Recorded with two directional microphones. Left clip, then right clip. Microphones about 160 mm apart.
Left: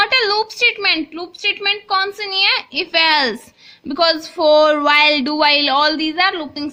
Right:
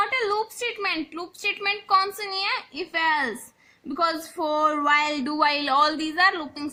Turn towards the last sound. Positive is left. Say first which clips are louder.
# left 4 dB
turn(degrees=5)  # may be behind; listen again after turning